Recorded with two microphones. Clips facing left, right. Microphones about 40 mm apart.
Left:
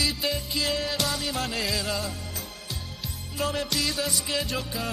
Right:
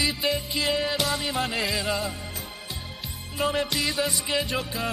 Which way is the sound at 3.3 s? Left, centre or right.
Centre.